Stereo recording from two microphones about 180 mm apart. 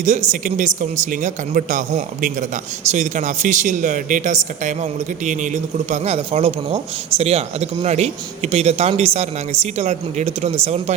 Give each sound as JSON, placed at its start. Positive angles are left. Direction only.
{"t": 0.0, "sound": "speech", "side_deg": -40}